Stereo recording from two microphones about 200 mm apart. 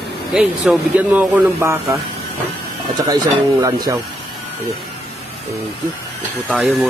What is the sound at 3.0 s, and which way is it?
Speech, 20° right (ahead or behind).